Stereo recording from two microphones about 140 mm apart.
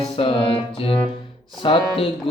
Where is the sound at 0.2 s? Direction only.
40° left (ahead or behind).